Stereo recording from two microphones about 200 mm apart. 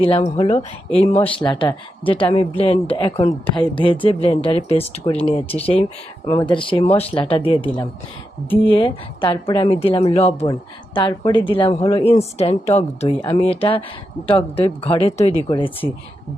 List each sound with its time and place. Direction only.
0.0 s speech: 30° left (ahead or behind)